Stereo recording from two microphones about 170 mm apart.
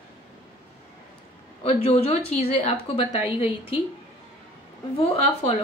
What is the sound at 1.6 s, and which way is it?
A woman's voice, 35° left (ahead or behind).